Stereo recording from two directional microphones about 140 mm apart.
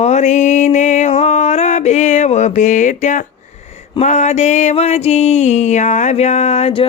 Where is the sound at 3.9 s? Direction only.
55° left (ahead or behind).